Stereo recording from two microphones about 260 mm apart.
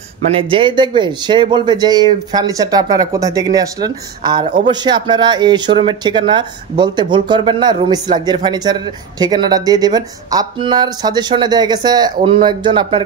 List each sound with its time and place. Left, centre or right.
0.3 s speech: centre